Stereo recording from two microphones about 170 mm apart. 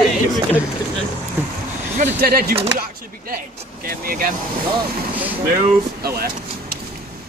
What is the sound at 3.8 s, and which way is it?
Speech, 60° right (ahead or behind).